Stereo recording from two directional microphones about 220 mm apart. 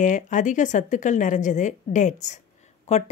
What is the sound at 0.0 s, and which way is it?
Speech, 35° left (ahead or behind).